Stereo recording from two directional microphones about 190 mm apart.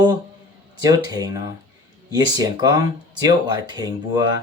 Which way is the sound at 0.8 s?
20° right (ahead or behind).